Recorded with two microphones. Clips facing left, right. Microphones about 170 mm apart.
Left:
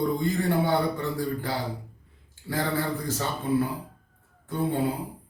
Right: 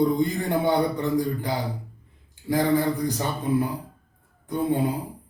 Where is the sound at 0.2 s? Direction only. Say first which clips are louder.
Right 1 dB; 20° right (ahead or behind).